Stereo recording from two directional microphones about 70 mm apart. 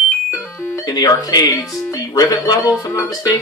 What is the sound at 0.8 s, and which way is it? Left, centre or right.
Speech, left.